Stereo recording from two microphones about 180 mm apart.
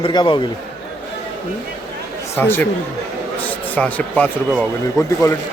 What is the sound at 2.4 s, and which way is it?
Speech, 10° left (ahead or behind).